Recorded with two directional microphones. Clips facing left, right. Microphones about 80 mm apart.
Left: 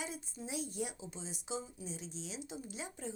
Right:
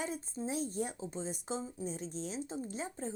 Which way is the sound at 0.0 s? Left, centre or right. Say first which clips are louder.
Right 6 dB; right.